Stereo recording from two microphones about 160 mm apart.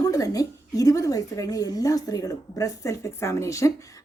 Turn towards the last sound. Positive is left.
turn(degrees=20)  # may be behind; listen again after turning